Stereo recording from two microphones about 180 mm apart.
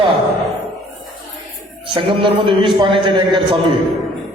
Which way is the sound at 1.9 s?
30° right (ahead or behind).